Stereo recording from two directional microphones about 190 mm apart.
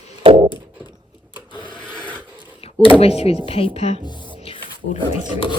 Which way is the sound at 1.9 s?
5° left (ahead or behind).